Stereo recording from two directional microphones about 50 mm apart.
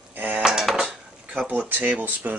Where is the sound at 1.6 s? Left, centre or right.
Right.